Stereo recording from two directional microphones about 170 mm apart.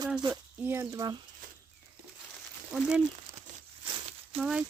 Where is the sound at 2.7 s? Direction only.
5° right (ahead or behind).